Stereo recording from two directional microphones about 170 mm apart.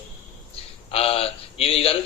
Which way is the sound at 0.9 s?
35° left (ahead or behind).